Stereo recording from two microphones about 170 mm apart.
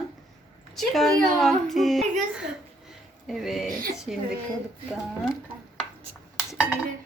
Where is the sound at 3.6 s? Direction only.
55° right (ahead or behind).